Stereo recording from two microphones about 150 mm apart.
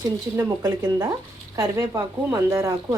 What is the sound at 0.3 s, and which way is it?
A woman's voice, 20° right (ahead or behind).